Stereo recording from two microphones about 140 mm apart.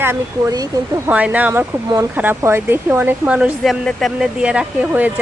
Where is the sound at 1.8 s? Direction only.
25° right (ahead or behind).